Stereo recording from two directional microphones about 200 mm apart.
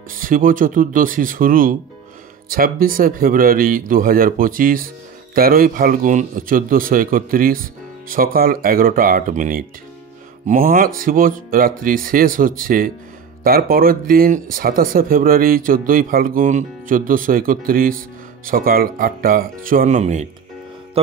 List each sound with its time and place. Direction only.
0.1 s a man's voice: 45° right (ahead or behind)